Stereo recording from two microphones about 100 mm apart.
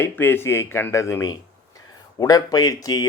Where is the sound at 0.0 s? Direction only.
20° left (ahead or behind).